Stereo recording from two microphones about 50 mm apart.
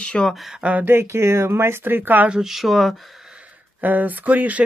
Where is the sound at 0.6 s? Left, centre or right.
Right.